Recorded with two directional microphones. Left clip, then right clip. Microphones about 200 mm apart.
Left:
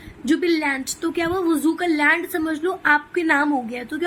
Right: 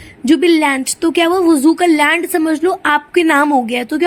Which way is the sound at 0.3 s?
35° right (ahead or behind).